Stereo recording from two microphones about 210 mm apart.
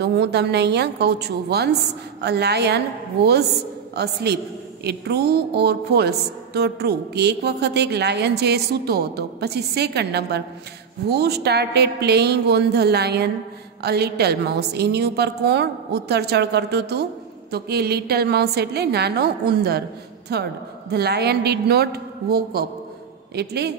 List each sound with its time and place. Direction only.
0.0 s a woman's voice: 50° right (ahead or behind)
3.9 s a woman's voice: 50° right (ahead or behind)